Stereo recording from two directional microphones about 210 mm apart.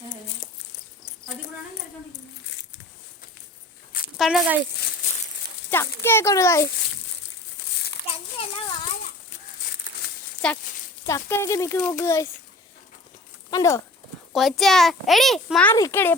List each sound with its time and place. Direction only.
0.4 s a sound: 40° left (ahead or behind)
4.2 s a child's voice: 5° right (ahead or behind)
5.7 s speech: 10° left (ahead or behind)
9.6 s a sound: 45° left (ahead or behind)
10.4 s a child's voice: 5° left (ahead or behind)
13.5 s speech: 15° left (ahead or behind)
14.3 s a child's voice: centre (ahead or behind)
15.7 s speech: 15° left (ahead or behind)